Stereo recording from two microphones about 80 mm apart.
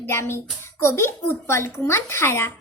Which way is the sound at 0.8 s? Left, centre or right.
Left.